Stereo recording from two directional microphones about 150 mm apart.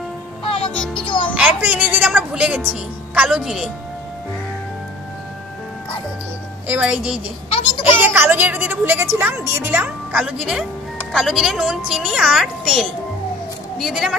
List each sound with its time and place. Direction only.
1.0 s music: 35° left (ahead or behind)
1.3 s a woman's voice: 10° right (ahead or behind)
6.7 s a woman's voice: 5° right (ahead or behind)
7.4 s a sound: 40° left (ahead or behind)
8.0 s a woman's voice: 15° right (ahead or behind)